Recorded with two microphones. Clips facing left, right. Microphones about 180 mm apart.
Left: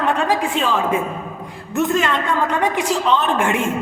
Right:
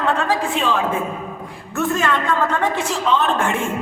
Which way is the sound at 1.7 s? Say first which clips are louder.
Left 2 dB; 20° left (ahead or behind).